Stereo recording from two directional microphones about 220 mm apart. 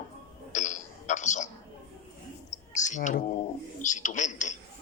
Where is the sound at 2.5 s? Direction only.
35° left (ahead or behind).